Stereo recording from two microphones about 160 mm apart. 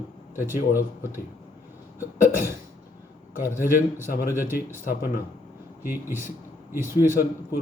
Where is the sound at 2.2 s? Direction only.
60° left (ahead or behind).